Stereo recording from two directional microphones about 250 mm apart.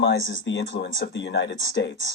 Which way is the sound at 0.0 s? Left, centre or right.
Left.